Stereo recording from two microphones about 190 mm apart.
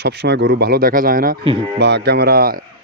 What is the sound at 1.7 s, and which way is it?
Speech, 65° right (ahead or behind).